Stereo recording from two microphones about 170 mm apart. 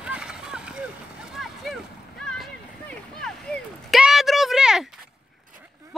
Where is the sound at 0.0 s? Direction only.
5° right (ahead or behind).